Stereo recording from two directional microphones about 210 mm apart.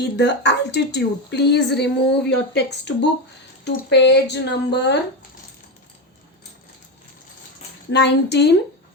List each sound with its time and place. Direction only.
0.0 s speech: 55° left (ahead or behind)
7.9 s speech: 55° left (ahead or behind)